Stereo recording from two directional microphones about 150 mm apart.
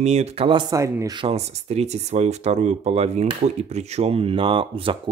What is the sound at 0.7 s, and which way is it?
Speech, 20° right (ahead or behind).